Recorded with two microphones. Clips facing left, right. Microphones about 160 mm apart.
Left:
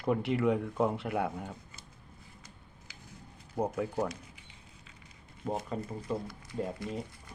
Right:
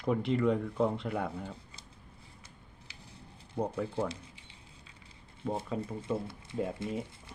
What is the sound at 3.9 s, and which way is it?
Speech, 30° right (ahead or behind).